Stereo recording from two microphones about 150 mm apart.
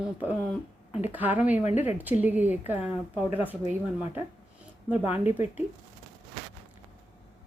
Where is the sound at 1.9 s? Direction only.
10° right (ahead or behind).